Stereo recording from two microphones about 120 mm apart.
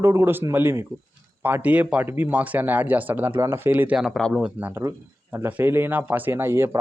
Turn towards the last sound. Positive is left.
turn(degrees=-20)  # may be behind; listen again after turning